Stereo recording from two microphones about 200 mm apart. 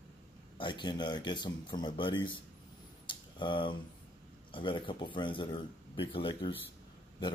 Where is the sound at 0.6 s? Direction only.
25° left (ahead or behind).